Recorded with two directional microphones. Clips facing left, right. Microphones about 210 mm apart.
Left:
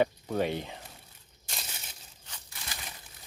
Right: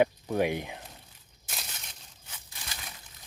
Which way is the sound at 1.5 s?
Centre (ahead or behind).